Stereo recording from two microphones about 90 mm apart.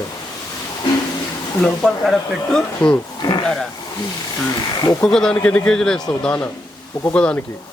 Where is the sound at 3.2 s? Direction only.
55° left (ahead or behind).